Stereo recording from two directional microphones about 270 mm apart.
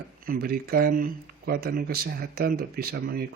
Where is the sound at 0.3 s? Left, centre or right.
Right.